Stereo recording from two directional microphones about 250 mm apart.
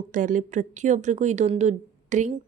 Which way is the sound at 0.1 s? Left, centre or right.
Right.